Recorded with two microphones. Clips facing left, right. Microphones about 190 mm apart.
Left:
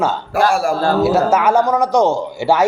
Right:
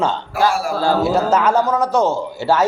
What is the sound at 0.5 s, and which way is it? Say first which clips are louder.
Speech: left 4 dB; 50° left (ahead or behind).